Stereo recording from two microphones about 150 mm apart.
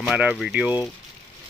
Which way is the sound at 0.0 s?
5° right (ahead or behind).